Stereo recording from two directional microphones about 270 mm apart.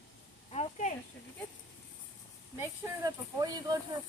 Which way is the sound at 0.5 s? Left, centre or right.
Left.